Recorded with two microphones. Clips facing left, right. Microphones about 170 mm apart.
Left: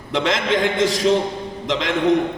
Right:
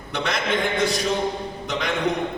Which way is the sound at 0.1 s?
90° left.